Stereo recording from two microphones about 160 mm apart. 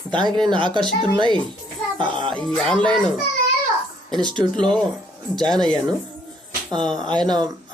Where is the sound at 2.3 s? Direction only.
5° left (ahead or behind).